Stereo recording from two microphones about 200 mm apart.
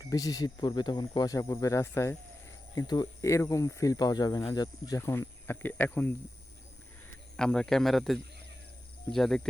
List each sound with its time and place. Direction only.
0.0 s speech: 15° left (ahead or behind)
7.3 s speech: 5° left (ahead or behind)